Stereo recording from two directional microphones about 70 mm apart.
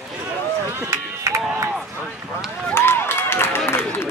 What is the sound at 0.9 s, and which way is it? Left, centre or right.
Run, right.